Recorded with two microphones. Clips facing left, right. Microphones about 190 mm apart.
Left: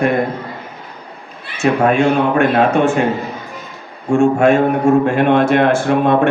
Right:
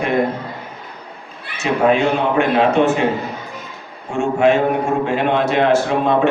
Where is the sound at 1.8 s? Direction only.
50° left (ahead or behind).